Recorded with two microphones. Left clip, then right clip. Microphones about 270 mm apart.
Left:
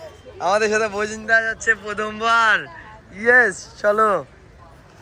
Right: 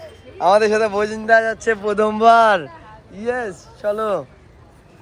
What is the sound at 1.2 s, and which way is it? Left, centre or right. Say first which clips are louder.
Speech: right 2 dB; centre.